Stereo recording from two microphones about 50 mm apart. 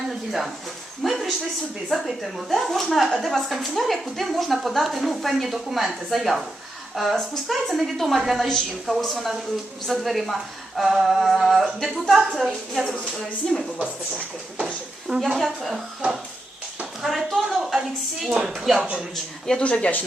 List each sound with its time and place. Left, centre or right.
0.3 s a woman's voice: centre
8.4 s a woman's voice: centre
15.1 s a woman's voice: centre
17.0 s a sound: centre
17.7 s a woman's voice: centre
18.4 s a woman's voice: centre
18.8 s speech: centre
19.5 s speech: centre